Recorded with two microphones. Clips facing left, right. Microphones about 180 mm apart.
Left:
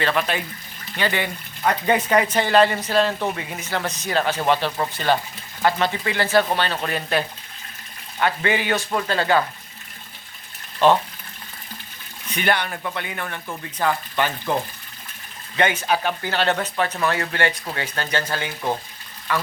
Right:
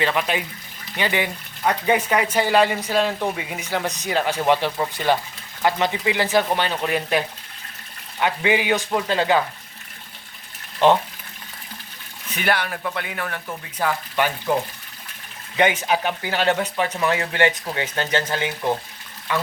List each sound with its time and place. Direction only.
0.0 s speech: 15° right (ahead or behind)
12.3 s speech: 5° right (ahead or behind)
15.5 s speech: 15° right (ahead or behind)